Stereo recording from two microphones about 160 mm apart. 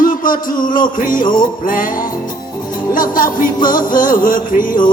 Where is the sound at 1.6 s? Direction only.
60° left (ahead or behind).